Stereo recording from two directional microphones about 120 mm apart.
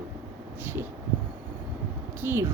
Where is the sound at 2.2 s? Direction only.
20° right (ahead or behind).